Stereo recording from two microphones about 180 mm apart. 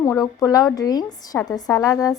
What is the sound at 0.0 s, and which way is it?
A woman's voice, 15° left (ahead or behind).